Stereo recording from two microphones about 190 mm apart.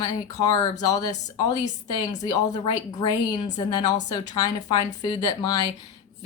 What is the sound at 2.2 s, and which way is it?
A woman's voice, 20° left (ahead or behind).